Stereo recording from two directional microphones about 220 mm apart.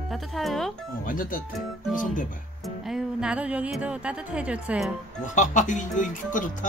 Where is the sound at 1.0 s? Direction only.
40° left (ahead or behind).